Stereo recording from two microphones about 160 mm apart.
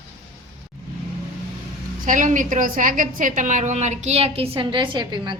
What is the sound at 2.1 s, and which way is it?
A woman's voice, 55° right (ahead or behind).